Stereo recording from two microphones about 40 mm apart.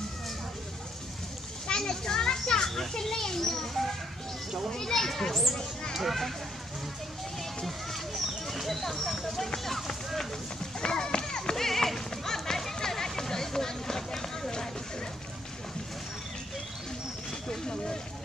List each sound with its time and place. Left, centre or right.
1.7 s children playing: centre
4.6 s a child's voice: centre
5.9 s speech: centre
7.6 s a sound: centre
10.8 s horse: centre